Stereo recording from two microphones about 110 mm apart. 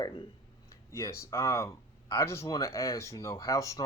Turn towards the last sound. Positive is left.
turn(degrees=30)  # may be behind; listen again after turning